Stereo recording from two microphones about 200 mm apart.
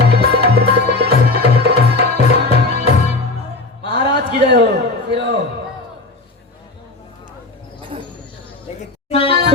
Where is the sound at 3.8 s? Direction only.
60° right (ahead or behind).